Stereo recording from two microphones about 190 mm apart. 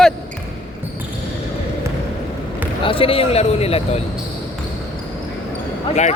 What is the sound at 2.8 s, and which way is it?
Speech, 30° left (ahead or behind).